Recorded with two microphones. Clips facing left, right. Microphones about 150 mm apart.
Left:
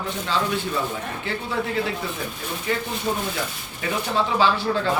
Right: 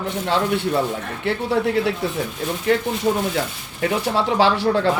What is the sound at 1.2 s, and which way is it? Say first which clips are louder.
A man's voice: right 9 dB; 70° right (ahead or behind).